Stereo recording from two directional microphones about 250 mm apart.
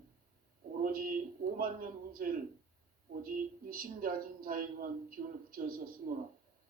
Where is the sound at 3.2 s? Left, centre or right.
Right.